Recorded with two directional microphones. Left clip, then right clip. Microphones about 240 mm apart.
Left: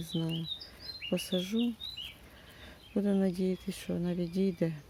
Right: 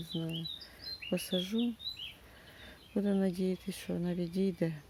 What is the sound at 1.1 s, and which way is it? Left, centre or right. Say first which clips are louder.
Speech: left 2 dB; centre.